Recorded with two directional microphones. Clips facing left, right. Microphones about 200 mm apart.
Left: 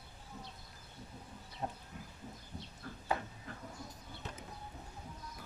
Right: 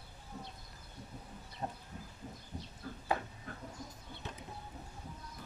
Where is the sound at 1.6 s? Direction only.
5° left (ahead or behind).